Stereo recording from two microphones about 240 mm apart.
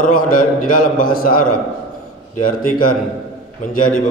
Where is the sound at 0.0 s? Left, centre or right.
Left.